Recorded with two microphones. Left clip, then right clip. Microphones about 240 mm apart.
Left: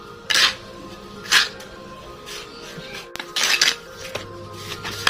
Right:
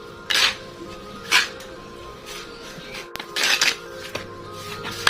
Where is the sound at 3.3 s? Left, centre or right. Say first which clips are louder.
Left 1 dB; centre.